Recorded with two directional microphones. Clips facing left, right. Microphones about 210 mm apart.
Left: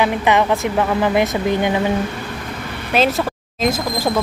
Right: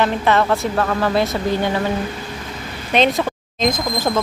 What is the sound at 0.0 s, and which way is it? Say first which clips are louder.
Speech: left 1 dB; 15° left (ahead or behind).